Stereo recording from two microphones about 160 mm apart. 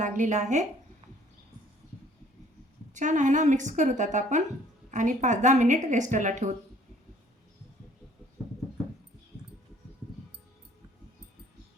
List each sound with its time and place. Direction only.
0.0 s a woman's voice: 55° right (ahead or behind)
2.9 s a woman's voice: 50° right (ahead or behind)